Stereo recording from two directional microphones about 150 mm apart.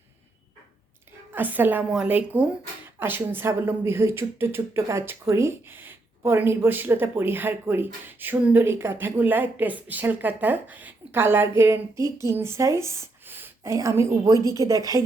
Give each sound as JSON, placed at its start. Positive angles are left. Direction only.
{"t": 1.3, "sound": "a woman's voice", "side_deg": -10}